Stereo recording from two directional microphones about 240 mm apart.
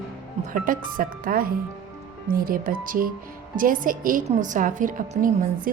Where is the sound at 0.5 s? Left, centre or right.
Right.